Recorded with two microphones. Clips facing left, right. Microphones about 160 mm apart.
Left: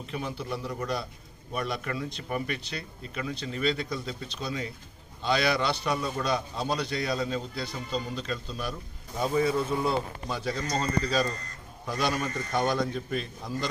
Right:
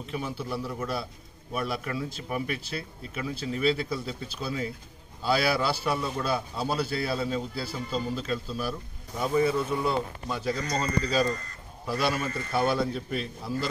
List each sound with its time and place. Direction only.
0.1 s a man's voice: centre (ahead or behind)
10.6 s speech: 30° left (ahead or behind)
11.8 s a man's voice: 5° right (ahead or behind)